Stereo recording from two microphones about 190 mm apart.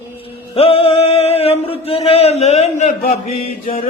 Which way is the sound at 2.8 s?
40° left (ahead or behind).